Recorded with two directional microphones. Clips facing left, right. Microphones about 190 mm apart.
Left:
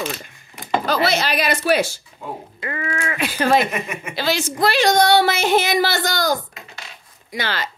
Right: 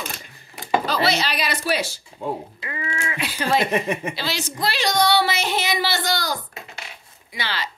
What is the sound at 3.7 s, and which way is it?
Speech, 30° right (ahead or behind).